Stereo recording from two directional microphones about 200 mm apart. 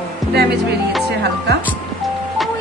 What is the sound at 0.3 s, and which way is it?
Speech, 55° right (ahead or behind).